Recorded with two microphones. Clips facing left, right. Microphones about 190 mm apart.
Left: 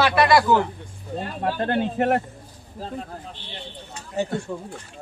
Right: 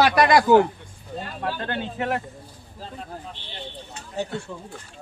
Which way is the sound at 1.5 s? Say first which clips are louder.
Left 6 dB; 45° left (ahead or behind).